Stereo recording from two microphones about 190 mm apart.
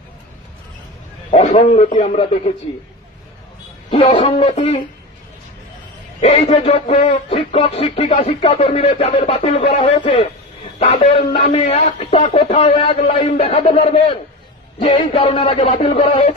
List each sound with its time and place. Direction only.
1.3 s speech: 35° left (ahead or behind)
3.9 s speech: 30° left (ahead or behind)
6.2 s speech: 35° left (ahead or behind)